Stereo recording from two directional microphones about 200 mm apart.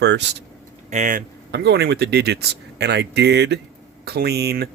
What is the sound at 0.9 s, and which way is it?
Speech, 40° right (ahead or behind).